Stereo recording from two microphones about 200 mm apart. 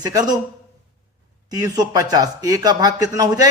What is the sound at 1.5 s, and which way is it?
Speech, 20° right (ahead or behind).